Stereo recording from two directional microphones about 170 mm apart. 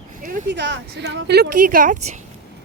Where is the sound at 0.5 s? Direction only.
90° right.